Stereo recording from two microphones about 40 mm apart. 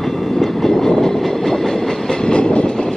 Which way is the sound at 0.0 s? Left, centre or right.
Centre.